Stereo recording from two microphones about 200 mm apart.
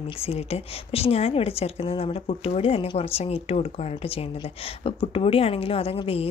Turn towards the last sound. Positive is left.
turn(degrees=30)  # may be behind; listen again after turning